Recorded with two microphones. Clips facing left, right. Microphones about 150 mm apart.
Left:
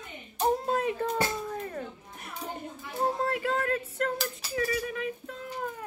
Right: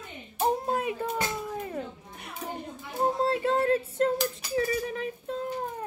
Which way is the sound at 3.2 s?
25° right (ahead or behind).